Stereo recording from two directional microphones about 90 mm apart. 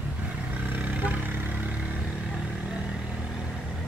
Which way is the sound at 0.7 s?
20° right (ahead or behind).